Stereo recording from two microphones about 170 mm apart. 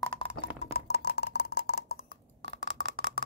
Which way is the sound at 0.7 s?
70° left (ahead or behind).